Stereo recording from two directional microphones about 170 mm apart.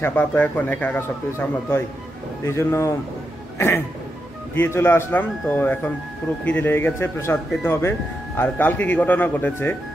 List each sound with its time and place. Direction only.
0.0 s speech: 10° left (ahead or behind)
2.4 s speech: 15° left (ahead or behind)
3.5 s a sound: 15° left (ahead or behind)
4.6 s speech: 15° left (ahead or behind)